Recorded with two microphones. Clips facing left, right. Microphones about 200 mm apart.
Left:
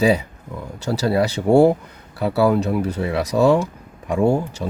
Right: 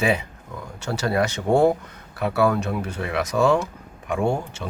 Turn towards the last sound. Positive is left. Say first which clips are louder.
# left 5 dB
turn(degrees=40)  # may be behind; listen again after turning